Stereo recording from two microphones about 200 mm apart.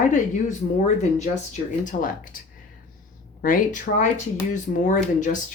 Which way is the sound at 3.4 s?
40° left (ahead or behind).